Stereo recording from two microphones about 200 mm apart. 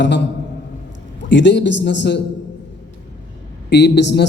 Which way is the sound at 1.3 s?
65° left (ahead or behind).